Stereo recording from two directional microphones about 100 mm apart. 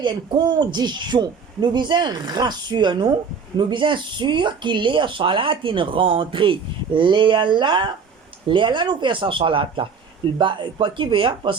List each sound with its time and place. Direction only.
0.0 s a woman's voice: 50° right (ahead or behind)